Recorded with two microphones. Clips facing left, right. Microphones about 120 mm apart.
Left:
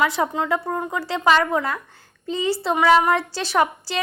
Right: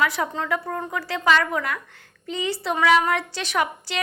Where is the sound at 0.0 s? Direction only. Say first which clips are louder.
Left 3 dB; 25° left (ahead or behind).